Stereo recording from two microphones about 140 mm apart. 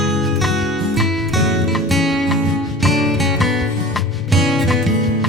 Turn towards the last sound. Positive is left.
turn(degrees=0)  # may be behind; listen again after turning